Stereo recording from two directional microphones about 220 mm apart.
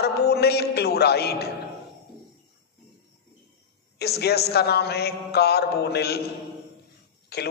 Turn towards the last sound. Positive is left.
turn(degrees=45)  # may be behind; listen again after turning